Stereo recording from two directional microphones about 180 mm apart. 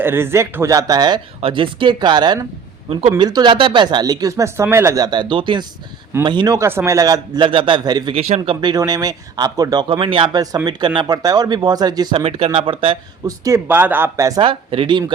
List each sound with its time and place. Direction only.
0.0 s speech: 10° right (ahead or behind)
8.1 s speech: 35° right (ahead or behind)
8.4 s speech: 25° right (ahead or behind)
12.2 s speech: 30° right (ahead or behind)
13.4 s speech: 15° right (ahead or behind)
14.4 s speech: 30° right (ahead or behind)